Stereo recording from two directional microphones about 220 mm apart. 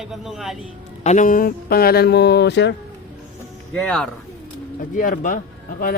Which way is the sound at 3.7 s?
5° left (ahead or behind).